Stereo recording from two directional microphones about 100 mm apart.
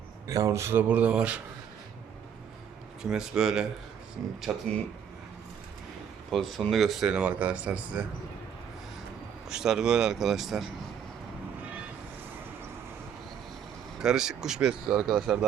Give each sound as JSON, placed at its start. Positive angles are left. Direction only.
{"t": 0.3, "sound": "speech", "side_deg": -35}
{"t": 0.9, "sound": "speech", "side_deg": -15}
{"t": 3.0, "sound": "speech", "side_deg": -5}
{"t": 6.3, "sound": "speech", "side_deg": 0}
{"t": 9.5, "sound": "speech", "side_deg": -5}
{"t": 14.0, "sound": "speech", "side_deg": -5}